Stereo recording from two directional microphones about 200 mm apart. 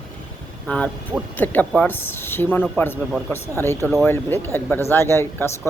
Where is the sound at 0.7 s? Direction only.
10° left (ahead or behind).